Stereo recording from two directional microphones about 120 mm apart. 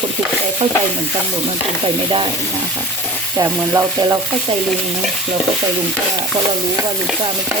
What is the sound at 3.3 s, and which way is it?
Frying, 25° right (ahead or behind).